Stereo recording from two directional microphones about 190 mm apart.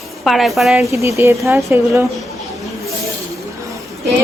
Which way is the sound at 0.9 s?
15° right (ahead or behind).